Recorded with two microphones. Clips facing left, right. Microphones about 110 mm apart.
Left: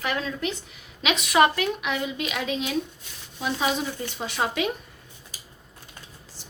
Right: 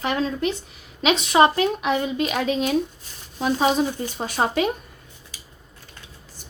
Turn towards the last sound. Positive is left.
turn(degrees=-40)  # may be behind; listen again after turning